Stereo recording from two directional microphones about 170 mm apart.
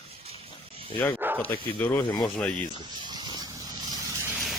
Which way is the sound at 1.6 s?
30° left (ahead or behind).